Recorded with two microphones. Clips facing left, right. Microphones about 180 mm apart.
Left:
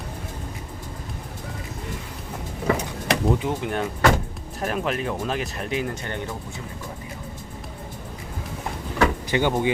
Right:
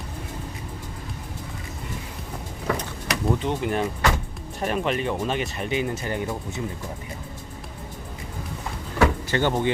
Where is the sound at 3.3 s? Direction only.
10° left (ahead or behind).